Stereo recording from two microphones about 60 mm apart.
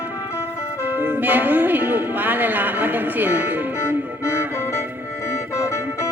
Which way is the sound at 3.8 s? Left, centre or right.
Left.